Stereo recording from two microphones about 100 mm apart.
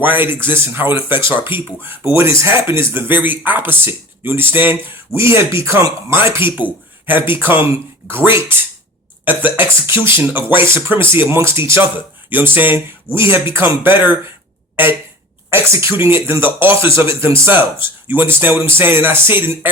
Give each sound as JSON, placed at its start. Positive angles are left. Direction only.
{"t": 0.0, "sound": "speech", "side_deg": -20}
{"t": 15.4, "sound": "speech", "side_deg": -25}